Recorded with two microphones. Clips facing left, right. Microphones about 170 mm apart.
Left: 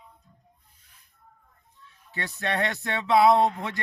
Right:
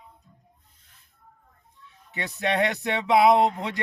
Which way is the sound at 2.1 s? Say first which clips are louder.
Right 3 dB; 20° right (ahead or behind).